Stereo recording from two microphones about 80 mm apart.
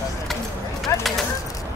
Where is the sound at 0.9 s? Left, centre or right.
Left.